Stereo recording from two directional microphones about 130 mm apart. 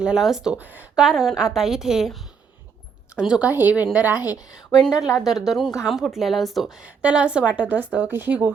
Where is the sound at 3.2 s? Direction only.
5° right (ahead or behind).